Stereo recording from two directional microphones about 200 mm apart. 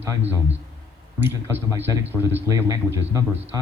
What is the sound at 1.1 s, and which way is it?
Speech, 10° right (ahead or behind).